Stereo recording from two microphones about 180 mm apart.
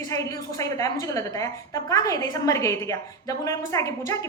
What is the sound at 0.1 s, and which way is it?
A woman's voice, 20° left (ahead or behind).